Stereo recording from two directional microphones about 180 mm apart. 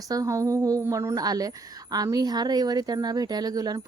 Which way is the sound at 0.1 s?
20° right (ahead or behind).